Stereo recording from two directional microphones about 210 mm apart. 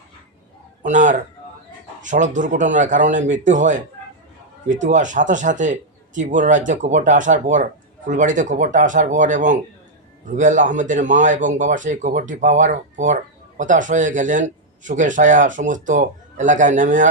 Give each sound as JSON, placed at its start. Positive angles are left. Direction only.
{"t": 0.8, "sound": "a man's voice", "side_deg": -35}